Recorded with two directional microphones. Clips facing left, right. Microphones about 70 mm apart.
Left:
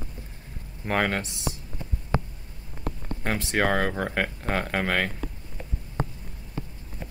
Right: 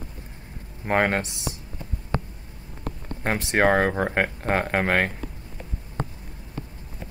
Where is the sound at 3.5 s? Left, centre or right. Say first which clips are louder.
Right 5 dB; right.